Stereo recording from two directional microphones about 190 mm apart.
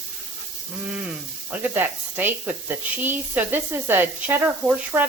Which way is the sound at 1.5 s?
10° right (ahead or behind).